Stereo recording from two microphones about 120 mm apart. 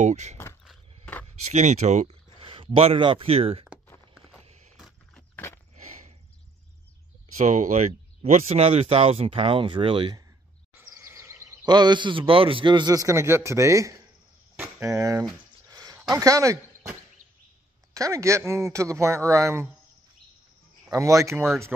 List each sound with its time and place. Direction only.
0.0 s speech: 75° right (ahead or behind)
1.5 s speech: 70° right (ahead or behind)
2.4 s speech: 50° right (ahead or behind)
4.5 s vehicle: 70° right (ahead or behind)
4.7 s horse: centre (ahead or behind)
5.3 s a sound: 20° left (ahead or behind)
7.3 s speech: 90° right; by 10.1 s 45° right (ahead or behind)
10.8 s a sound: 20° right (ahead or behind)
11.6 s a man's voice: 35° right (ahead or behind)
15.7 s a sound: 35° right (ahead or behind)
16.1 s speech: 30° right (ahead or behind)
17.9 s speech: 25° right (ahead or behind)
20.9 s speech: 25° right (ahead or behind)